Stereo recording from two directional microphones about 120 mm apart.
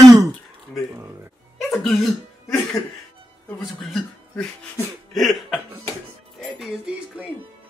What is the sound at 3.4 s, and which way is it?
Speech, 5° left (ahead or behind).